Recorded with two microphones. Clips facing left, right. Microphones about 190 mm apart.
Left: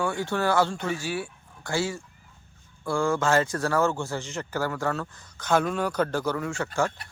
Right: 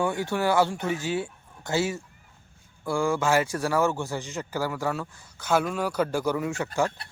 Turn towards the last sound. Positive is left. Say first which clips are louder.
# right 1 dB
turn(degrees=-15)  # may be behind; listen again after turning